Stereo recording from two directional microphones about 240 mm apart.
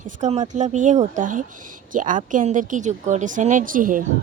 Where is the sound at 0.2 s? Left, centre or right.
Right.